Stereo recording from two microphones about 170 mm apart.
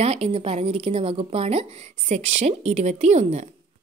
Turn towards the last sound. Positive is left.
turn(degrees=-45)  # may be behind; listen again after turning